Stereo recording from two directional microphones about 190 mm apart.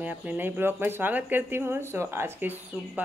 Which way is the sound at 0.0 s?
10° right (ahead or behind).